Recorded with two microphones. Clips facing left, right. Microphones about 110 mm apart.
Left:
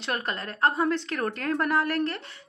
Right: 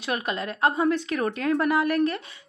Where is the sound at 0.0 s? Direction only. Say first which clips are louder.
Right 3 dB; 10° right (ahead or behind).